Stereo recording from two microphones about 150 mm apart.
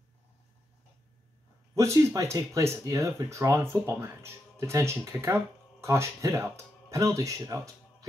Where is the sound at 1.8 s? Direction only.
20° right (ahead or behind).